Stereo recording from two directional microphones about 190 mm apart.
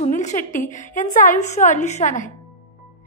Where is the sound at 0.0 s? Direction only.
40° left (ahead or behind).